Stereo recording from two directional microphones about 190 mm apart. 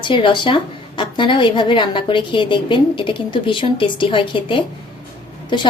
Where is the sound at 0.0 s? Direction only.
25° left (ahead or behind).